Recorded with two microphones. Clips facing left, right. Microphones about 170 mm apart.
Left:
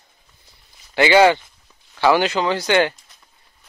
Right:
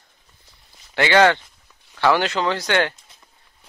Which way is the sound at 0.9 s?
10° left (ahead or behind).